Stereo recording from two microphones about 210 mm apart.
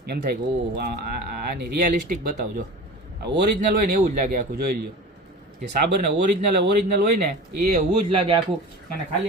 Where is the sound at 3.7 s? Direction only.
45° right (ahead or behind).